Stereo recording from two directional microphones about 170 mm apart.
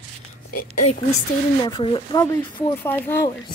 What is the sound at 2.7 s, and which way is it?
Speech, 10° left (ahead or behind).